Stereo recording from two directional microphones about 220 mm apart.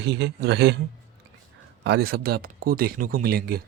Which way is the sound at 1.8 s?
50° right (ahead or behind).